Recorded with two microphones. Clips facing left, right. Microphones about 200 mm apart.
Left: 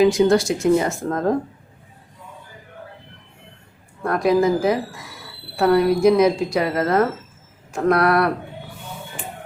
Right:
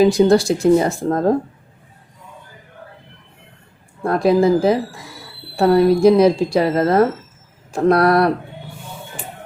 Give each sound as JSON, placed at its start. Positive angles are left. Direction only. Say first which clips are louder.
{"t": 0.0, "sound": "speech", "louder": "right 3 dB", "side_deg": -35}
{"t": 4.0, "sound": "speech", "louder": "right 3 dB", "side_deg": -30}